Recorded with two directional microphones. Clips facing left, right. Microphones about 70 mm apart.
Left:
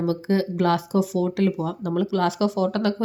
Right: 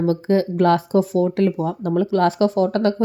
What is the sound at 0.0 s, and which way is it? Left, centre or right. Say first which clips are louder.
Speech: right 4 dB; right.